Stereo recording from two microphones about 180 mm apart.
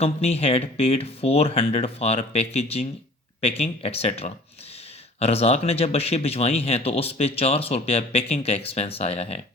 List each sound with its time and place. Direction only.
0.0 s speech: 35° left (ahead or behind)